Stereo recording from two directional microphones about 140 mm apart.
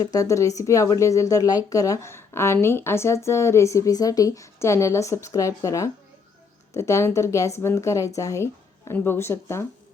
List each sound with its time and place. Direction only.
0.0 s a woman's voice: 25° left (ahead or behind)